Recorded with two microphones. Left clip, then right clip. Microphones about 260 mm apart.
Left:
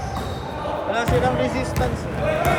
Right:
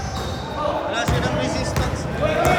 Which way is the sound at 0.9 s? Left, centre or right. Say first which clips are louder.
Left 2 dB; left.